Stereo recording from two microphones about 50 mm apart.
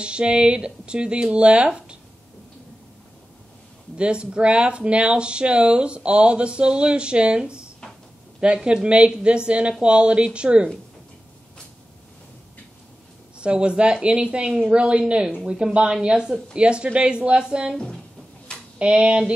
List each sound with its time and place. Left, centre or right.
0.0 s speech: centre
3.9 s speech: right
13.4 s speech: right
18.8 s speech: right